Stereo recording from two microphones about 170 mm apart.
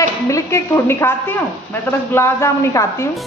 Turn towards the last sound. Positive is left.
turn(degrees=15)  # may be behind; listen again after turning